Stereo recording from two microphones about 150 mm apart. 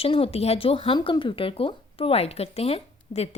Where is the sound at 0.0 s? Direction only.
40° left (ahead or behind).